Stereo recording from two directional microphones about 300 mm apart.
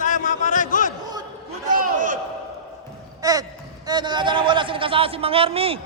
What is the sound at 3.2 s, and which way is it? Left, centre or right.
Speech, centre.